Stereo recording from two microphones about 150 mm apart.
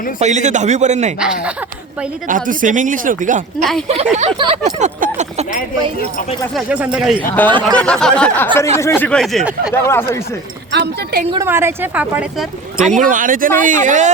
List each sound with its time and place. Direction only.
0.2 s speech: 50° right (ahead or behind)
1.2 s speech: 5° right (ahead or behind)
2.2 s speech: 65° right (ahead or behind)
3.6 s speech: centre (ahead or behind)
3.8 s speech: 45° right (ahead or behind)
4.6 s speech: 60° right (ahead or behind)
6.5 s a woman's voice: 5° right (ahead or behind)
7.4 s a sound: 10° left (ahead or behind)
8.7 s a sound: 15° left (ahead or behind)
9.0 s speech: 5° left (ahead or behind)
9.7 s a sound: 15° left (ahead or behind)
11.4 s a woman's voice: 15° right (ahead or behind)
12.7 s speech: 55° right (ahead or behind)